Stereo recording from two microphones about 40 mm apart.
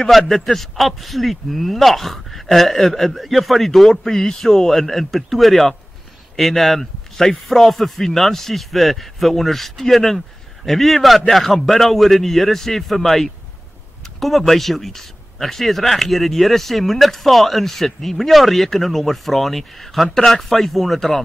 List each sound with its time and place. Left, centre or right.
0.3 s a man's voice: centre